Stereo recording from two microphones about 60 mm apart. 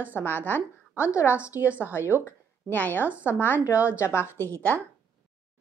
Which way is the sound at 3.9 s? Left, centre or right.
Left.